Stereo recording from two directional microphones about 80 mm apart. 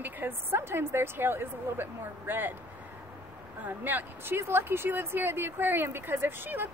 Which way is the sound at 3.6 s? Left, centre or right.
Right.